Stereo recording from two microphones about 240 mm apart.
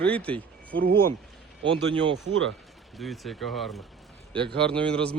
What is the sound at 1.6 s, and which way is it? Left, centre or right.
Speech, right.